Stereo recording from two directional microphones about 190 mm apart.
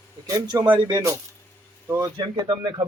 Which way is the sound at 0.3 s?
20° right (ahead or behind).